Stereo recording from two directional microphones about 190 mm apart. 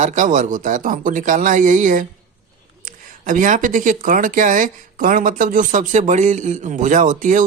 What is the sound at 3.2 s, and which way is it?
Speech, 40° right (ahead or behind).